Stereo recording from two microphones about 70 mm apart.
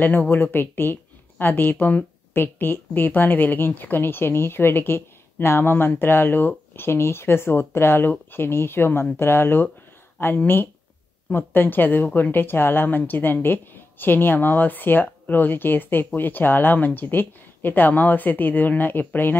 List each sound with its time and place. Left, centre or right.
0.0 s a woman's voice: left